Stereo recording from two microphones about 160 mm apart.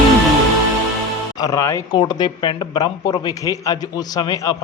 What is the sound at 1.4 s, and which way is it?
A man's voice, 20° left (ahead or behind).